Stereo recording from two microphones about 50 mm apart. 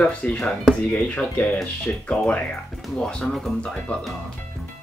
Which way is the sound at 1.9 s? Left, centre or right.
Left.